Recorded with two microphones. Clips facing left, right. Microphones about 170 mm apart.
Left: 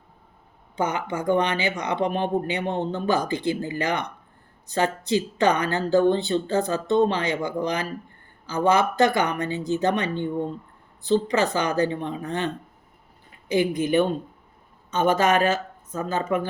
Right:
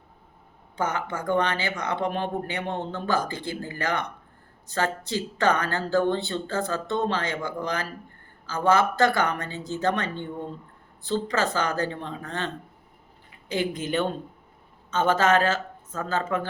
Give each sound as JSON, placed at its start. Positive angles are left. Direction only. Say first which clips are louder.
{"t": 0.8, "sound": "speech", "louder": "left 3 dB", "side_deg": 15}
{"t": 13.5, "sound": "speech", "louder": "left 6 dB", "side_deg": 15}